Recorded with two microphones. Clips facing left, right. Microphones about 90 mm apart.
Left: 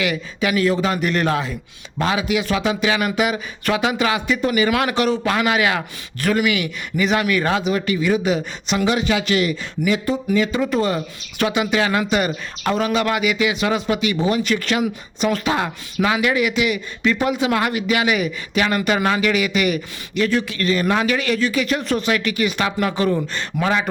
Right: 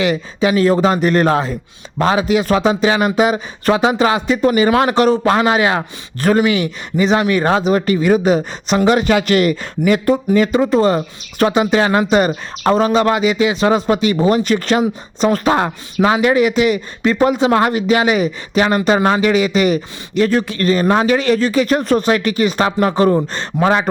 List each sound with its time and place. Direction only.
0.0 s speech: 30° right (ahead or behind); by 10.2 s 50° right (ahead or behind)
10.3 s speech: 40° right (ahead or behind)